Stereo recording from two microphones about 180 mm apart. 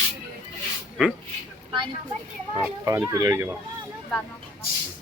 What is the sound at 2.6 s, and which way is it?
Speech, 10° right (ahead or behind).